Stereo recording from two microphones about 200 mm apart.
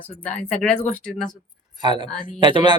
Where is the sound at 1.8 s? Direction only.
25° right (ahead or behind).